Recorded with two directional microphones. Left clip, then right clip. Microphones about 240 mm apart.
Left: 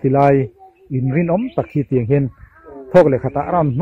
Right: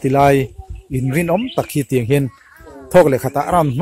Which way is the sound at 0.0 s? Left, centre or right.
Right.